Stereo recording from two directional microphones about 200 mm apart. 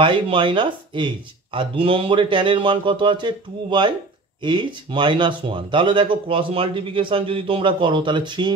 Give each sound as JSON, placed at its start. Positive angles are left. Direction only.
{"t": 0.0, "sound": "speech", "side_deg": -25}